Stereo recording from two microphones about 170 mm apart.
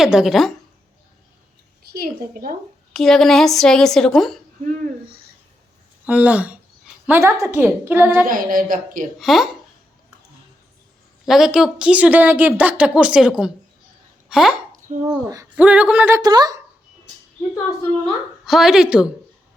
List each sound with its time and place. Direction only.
0.0 s a woman's voice: 5° right (ahead or behind)
1.9 s a woman's voice: 60° right (ahead or behind)
2.9 s a woman's voice: centre (ahead or behind)
6.1 s a woman's voice: 5° right (ahead or behind)
8.3 s a woman's voice: 55° right (ahead or behind)
9.1 s a woman's voice: centre (ahead or behind)
11.3 s a woman's voice: 5° right (ahead or behind)
15.0 s speech: 20° right (ahead or behind)
15.5 s a woman's voice: 10° right (ahead or behind)
16.2 s speech: 25° right (ahead or behind)
18.0 s a woman's voice: centre (ahead or behind)